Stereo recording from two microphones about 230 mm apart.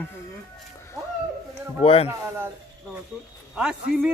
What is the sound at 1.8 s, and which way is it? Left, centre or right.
Speech, left.